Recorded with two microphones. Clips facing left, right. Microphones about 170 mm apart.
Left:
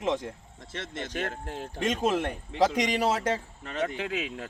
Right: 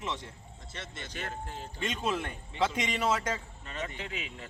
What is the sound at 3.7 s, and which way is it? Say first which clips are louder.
Speech: left 8 dB; 70° left (ahead or behind).